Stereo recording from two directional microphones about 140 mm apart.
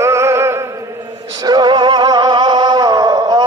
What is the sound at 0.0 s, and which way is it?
Music, 20° right (ahead or behind).